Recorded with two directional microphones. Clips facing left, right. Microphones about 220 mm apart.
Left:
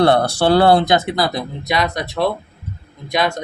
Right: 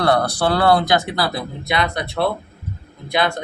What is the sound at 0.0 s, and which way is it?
Speech, 25° left (ahead or behind).